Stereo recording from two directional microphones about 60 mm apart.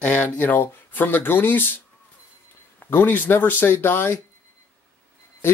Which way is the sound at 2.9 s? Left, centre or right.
Left.